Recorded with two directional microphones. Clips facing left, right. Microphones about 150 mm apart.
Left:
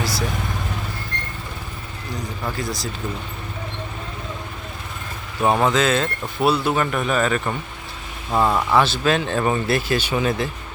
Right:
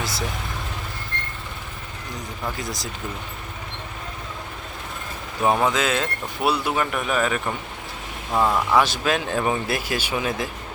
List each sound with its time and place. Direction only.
0.0 s vehicle: 20° right (ahead or behind)
5.6 s speech: 10° right (ahead or behind)
8.3 s speech: 10° left (ahead or behind)
8.7 s speech: 10° right (ahead or behind)